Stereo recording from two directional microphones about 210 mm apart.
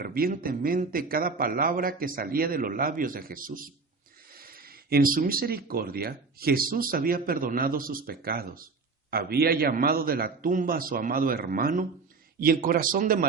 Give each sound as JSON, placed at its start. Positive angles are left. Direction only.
{"t": 0.0, "sound": "a man's voice", "side_deg": -45}